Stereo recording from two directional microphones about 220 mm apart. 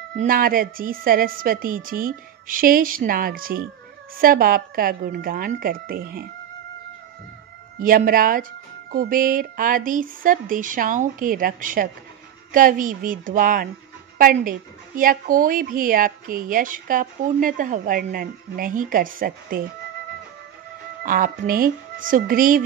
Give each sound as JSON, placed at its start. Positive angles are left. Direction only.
{"t": 0.2, "sound": "a woman's voice", "side_deg": -40}
{"t": 7.8, "sound": "a woman's voice", "side_deg": -40}
{"t": 21.0, "sound": "a woman's voice", "side_deg": -40}